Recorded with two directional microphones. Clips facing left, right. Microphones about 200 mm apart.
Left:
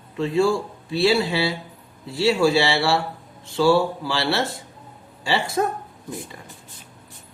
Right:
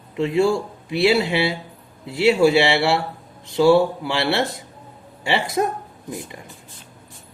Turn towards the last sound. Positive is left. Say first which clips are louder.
# right 1 dB
turn(degrees=-20)  # may be behind; listen again after turning